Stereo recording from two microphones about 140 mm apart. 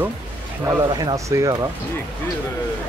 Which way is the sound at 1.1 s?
20° right (ahead or behind).